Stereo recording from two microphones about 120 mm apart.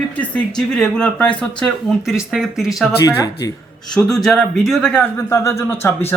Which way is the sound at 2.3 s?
5° right (ahead or behind).